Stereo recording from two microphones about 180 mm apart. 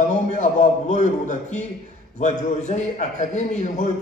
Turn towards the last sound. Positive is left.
turn(degrees=40)  # may be behind; listen again after turning